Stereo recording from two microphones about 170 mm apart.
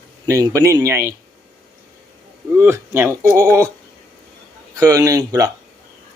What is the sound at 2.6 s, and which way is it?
Speech, 15° right (ahead or behind).